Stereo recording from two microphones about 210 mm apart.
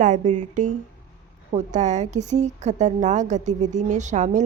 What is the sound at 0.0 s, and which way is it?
A woman's voice, 35° right (ahead or behind).